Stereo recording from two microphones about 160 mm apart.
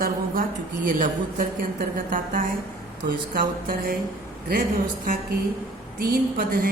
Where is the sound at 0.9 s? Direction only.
55° right (ahead or behind).